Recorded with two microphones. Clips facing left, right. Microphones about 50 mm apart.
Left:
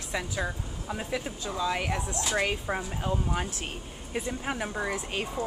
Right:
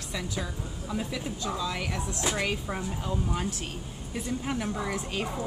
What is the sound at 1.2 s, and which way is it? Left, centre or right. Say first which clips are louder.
Speech: right 1 dB; centre.